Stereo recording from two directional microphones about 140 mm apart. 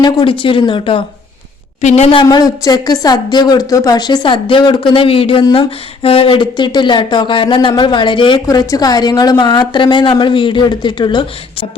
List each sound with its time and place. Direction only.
0.0 s a woman's voice: 35° left (ahead or behind)
1.8 s a woman's voice: 55° left (ahead or behind)
2.2 s a woman's voice: 25° left (ahead or behind)